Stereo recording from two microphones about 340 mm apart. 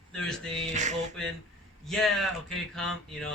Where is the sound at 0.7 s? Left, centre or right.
Right.